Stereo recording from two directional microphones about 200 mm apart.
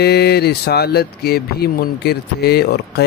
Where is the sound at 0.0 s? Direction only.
55° left (ahead or behind).